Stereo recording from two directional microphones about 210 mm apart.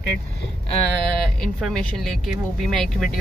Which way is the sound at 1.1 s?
Centre (ahead or behind).